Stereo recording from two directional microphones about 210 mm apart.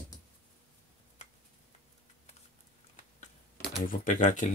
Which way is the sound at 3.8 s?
40° left (ahead or behind).